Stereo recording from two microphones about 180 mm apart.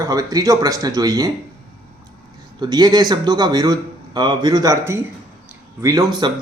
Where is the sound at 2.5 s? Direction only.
20° right (ahead or behind).